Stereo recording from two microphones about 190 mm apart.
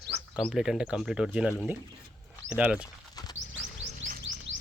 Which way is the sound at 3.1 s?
20° left (ahead or behind).